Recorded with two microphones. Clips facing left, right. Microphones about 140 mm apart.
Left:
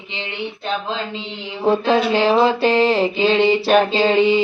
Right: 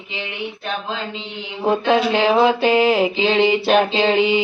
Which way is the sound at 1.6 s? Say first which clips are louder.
Left 1 dB; centre (ahead or behind).